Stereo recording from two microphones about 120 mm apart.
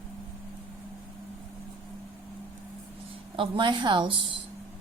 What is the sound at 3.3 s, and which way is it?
Speech, 45° right (ahead or behind).